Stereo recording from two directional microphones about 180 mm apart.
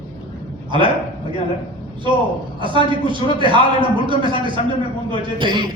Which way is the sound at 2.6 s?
25° right (ahead or behind).